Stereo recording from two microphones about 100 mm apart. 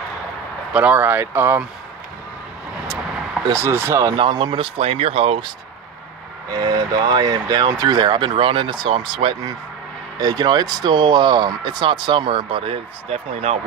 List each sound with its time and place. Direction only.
0.7 s speech: 15° right (ahead or behind)
3.5 s speech: 25° right (ahead or behind)
4.2 s speech: 50° right (ahead or behind); by 5.5 s 70° right (ahead or behind)
6.5 s speech: 45° right (ahead or behind); by 9.3 s 60° right (ahead or behind)
10.2 s speech: 45° right (ahead or behind); by 13.6 s 90° right